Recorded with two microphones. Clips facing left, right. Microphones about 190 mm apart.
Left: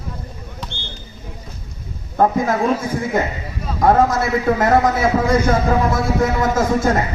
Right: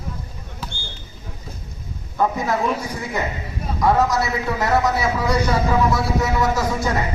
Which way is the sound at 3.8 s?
50° left (ahead or behind).